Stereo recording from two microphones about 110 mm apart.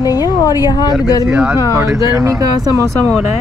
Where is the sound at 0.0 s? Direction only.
35° left (ahead or behind).